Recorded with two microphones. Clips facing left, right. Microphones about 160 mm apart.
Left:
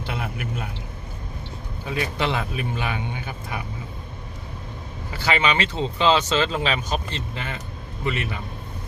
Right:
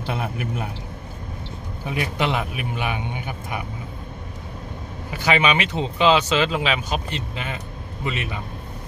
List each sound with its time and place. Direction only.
0.0 s a man's voice: 25° right (ahead or behind)
1.9 s speech: 15° right (ahead or behind)
5.1 s a man's voice: 15° right (ahead or behind)